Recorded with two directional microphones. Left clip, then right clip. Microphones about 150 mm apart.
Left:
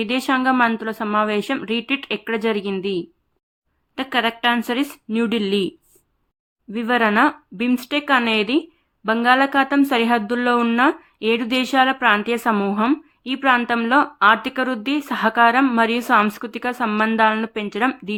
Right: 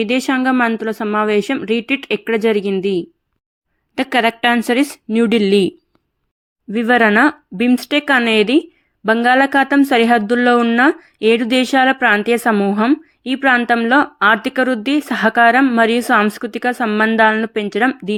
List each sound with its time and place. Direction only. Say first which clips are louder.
0.0 s a woman's voice: right 3 dB; 30° right (ahead or behind)
3.9 s a woman's voice: right 5 dB; 45° right (ahead or behind)